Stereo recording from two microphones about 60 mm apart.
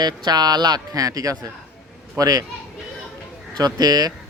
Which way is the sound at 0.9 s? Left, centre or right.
Right.